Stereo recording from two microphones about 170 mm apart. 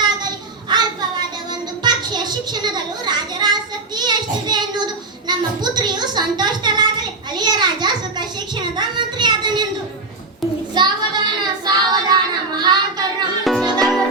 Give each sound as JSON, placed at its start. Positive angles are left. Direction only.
{"t": 0.0, "sound": "child singing", "side_deg": -25}
{"t": 1.8, "sound": "a sound", "side_deg": -25}
{"t": 10.8, "sound": "child singing", "side_deg": -25}
{"t": 13.4, "sound": "music", "side_deg": 0}